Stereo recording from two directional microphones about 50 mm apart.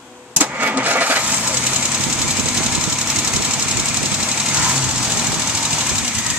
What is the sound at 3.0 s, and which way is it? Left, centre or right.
Engine, right.